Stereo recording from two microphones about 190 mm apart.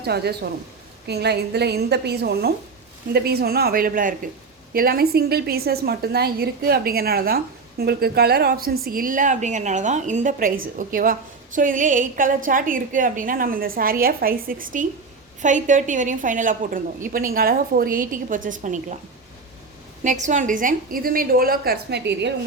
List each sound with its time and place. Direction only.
0.0 s a woman's voice: 60° right (ahead or behind); by 18.9 s 40° right (ahead or behind)
20.1 s a woman's voice: 40° right (ahead or behind); by 22.3 s 60° right (ahead or behind)